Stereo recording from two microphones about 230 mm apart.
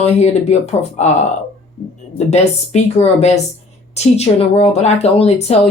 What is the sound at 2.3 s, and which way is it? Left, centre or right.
Speech, left.